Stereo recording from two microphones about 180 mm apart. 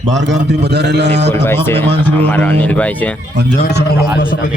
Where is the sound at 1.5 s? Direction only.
10° left (ahead or behind).